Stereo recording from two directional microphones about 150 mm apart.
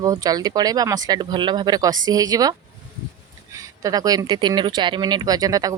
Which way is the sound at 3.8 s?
25° right (ahead or behind).